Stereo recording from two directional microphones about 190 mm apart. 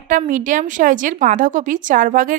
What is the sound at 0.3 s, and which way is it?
A woman's voice, 45° right (ahead or behind).